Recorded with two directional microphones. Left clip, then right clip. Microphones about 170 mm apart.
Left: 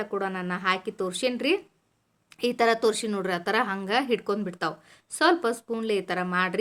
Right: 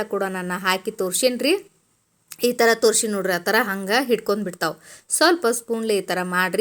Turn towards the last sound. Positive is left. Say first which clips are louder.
# right 4 dB
turn(degrees=-25)  # may be behind; listen again after turning